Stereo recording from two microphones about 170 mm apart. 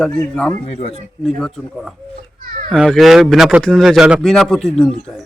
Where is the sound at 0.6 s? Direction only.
40° left (ahead or behind).